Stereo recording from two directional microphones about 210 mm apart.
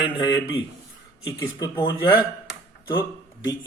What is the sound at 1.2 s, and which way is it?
Speech, 20° left (ahead or behind).